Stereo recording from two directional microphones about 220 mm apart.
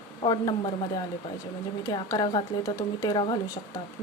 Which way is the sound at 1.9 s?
20° left (ahead or behind).